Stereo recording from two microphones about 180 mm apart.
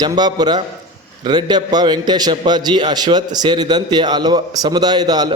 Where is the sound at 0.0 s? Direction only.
25° right (ahead or behind).